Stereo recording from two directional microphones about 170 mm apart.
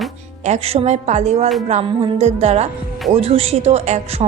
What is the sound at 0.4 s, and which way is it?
A woman's voice, 40° right (ahead or behind).